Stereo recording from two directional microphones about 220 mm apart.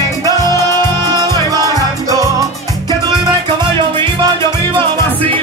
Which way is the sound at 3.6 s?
20° right (ahead or behind).